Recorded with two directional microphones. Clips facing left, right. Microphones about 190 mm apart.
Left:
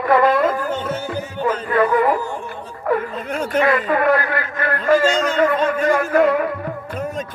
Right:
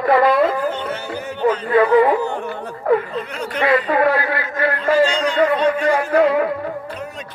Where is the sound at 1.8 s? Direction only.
65° right (ahead or behind).